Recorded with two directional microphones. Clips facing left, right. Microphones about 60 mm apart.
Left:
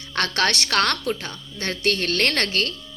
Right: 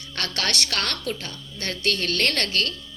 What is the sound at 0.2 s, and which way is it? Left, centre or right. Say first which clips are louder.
Speech: left 5 dB; left.